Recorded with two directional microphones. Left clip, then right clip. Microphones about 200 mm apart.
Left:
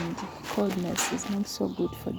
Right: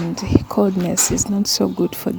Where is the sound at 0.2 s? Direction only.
40° right (ahead or behind).